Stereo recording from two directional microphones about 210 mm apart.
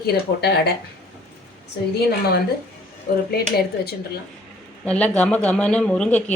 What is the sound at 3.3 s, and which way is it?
Speech, 50° left (ahead or behind).